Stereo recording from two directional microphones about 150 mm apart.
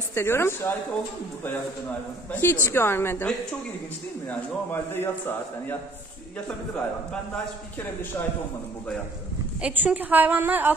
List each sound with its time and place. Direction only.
0.1 s a woman's voice: 15° left (ahead or behind)
2.3 s a woman's voice: 15° left (ahead or behind)
4.3 s a woman's voice: 15° left (ahead or behind)
9.6 s a woman's voice: 10° right (ahead or behind)